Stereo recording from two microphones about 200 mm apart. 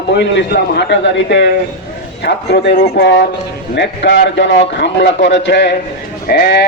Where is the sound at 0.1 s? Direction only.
60° left (ahead or behind).